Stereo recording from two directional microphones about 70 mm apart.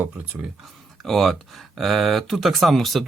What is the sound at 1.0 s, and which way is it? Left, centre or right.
Speech, centre.